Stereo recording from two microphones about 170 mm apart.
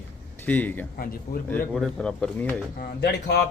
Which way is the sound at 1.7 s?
Centre (ahead or behind).